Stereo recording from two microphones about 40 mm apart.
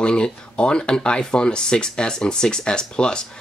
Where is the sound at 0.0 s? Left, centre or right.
Left.